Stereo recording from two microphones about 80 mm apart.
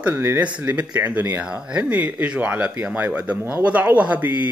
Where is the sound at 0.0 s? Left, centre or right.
Right.